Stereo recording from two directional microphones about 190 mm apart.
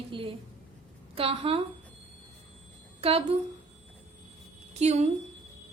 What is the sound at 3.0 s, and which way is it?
Speech, 30° right (ahead or behind).